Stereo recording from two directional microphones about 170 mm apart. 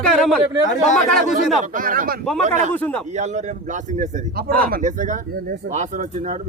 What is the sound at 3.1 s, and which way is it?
A man's voice, 45° right (ahead or behind).